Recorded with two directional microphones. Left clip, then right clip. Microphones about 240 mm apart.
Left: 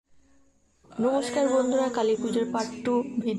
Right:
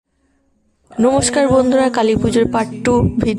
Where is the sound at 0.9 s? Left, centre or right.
Right.